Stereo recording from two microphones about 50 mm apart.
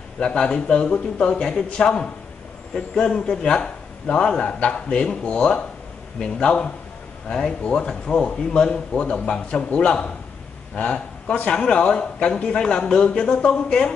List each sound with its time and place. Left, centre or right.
0.2 s a man's voice: centre